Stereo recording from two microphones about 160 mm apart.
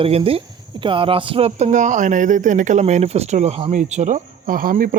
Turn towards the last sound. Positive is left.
turn(degrees=-65)  # may be behind; listen again after turning